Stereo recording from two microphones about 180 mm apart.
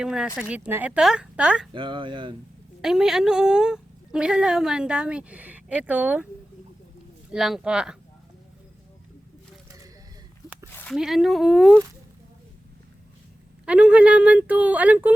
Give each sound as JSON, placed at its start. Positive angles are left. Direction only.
{"t": 0.0, "sound": "a woman's voice", "side_deg": -5}
{"t": 1.7, "sound": "speech", "side_deg": -25}
{"t": 2.8, "sound": "a woman's voice", "side_deg": -5}
{"t": 7.3, "sound": "a woman's voice", "side_deg": 0}
{"t": 10.8, "sound": "a woman's voice", "side_deg": 0}
{"t": 13.7, "sound": "speech", "side_deg": -5}